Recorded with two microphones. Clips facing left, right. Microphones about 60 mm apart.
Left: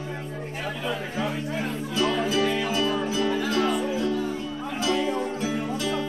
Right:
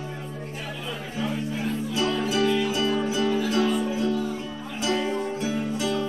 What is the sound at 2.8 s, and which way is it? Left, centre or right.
Music, right.